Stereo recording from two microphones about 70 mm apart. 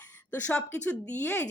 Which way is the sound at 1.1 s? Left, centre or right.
Left.